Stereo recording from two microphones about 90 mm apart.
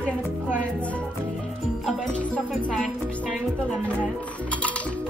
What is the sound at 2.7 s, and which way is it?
Music, centre (ahead or behind).